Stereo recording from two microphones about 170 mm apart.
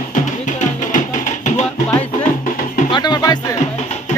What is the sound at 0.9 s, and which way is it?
Music, 45° left (ahead or behind).